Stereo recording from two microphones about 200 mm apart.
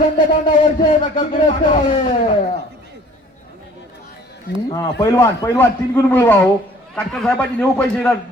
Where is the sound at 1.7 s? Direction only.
35° left (ahead or behind).